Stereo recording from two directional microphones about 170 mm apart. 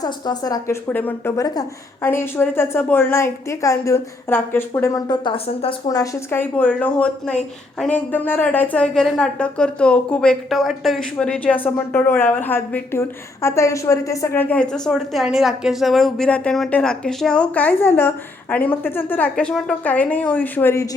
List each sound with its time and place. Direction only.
0.0 s speech: 20° left (ahead or behind)
0.9 s a woman's voice: 10° left (ahead or behind)